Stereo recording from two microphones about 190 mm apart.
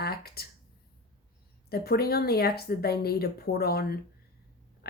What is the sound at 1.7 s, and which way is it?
Speech, 55° left (ahead or behind).